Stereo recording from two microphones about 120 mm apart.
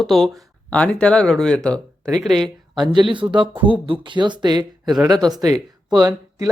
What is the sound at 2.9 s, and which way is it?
Speech, 40° right (ahead or behind).